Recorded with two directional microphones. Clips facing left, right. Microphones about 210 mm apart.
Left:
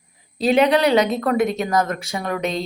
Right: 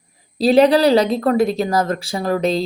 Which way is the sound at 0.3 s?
35° right (ahead or behind).